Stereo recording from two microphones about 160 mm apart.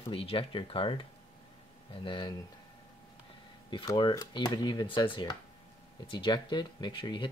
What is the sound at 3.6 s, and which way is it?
Speech, 30° left (ahead or behind).